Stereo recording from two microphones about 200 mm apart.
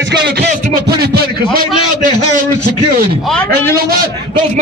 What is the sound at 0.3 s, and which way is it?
A man's voice, 50° right (ahead or behind).